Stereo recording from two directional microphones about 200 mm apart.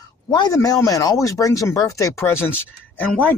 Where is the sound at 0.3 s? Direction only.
20° left (ahead or behind).